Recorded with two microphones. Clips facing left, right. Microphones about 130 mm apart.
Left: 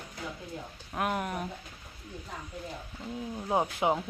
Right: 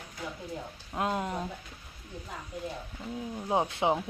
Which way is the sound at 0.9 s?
20° right (ahead or behind).